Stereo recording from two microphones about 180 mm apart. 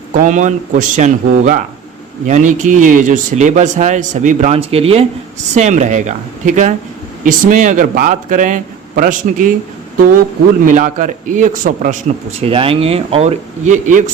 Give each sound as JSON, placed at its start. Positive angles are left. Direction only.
{"t": 0.1, "sound": "speech", "side_deg": -45}
{"t": 10.7, "sound": "speech", "side_deg": -45}